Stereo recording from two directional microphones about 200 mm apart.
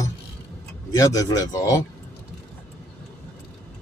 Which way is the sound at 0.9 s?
15° left (ahead or behind).